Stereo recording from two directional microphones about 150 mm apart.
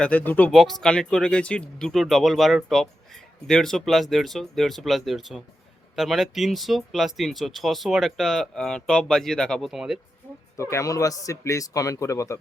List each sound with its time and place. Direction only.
0.0 s speech: 10° left (ahead or behind)
10.6 s a man's voice: 20° left (ahead or behind)